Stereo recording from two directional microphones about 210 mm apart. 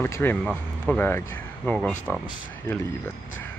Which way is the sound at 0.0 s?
10° left (ahead or behind).